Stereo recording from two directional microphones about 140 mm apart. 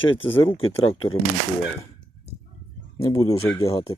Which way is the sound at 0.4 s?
45° left (ahead or behind).